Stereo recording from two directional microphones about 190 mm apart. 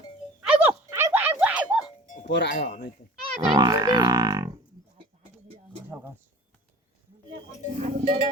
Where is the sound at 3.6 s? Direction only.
20° right (ahead or behind).